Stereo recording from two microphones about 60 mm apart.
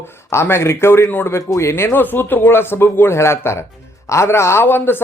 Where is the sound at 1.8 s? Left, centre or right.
Left.